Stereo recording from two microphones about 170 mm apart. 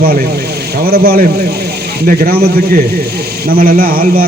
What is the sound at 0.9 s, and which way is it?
A man's voice, 65° right (ahead or behind).